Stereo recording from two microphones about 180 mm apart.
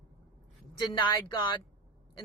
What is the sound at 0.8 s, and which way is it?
Speech, 25° left (ahead or behind).